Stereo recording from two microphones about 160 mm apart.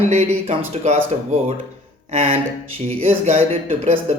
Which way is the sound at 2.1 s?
45° right (ahead or behind).